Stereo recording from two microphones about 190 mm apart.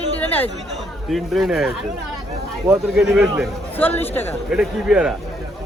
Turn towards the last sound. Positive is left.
turn(degrees=-5)  # may be behind; listen again after turning